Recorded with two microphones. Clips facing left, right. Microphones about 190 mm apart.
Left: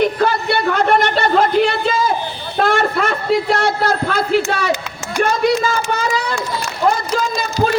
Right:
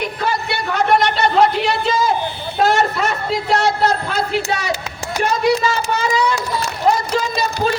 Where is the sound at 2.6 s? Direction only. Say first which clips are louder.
Even; 55° left (ahead or behind).